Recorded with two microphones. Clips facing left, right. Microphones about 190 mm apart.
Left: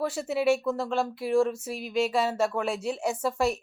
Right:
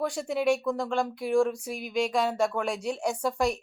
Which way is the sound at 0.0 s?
5° left (ahead or behind).